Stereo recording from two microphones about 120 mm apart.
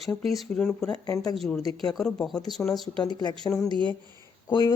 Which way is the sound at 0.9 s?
30° left (ahead or behind).